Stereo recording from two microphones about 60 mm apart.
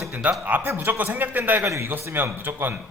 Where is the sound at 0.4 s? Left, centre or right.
Right.